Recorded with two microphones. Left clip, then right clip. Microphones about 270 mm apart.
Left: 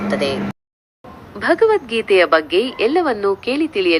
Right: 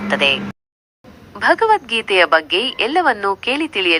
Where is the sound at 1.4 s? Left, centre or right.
Centre.